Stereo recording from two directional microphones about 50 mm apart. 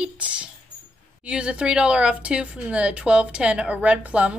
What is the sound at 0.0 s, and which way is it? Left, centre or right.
A woman's voice, right.